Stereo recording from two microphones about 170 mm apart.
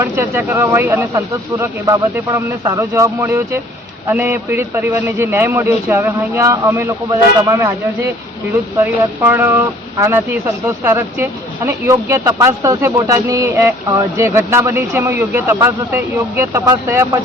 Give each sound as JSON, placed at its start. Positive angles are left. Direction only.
{"t": 0.0, "sound": "speech", "side_deg": -15}
{"t": 2.6, "sound": "speech", "side_deg": -20}
{"t": 8.8, "sound": "speech", "side_deg": -10}